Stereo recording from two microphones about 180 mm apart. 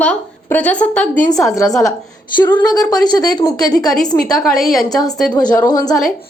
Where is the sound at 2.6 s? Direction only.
20° left (ahead or behind).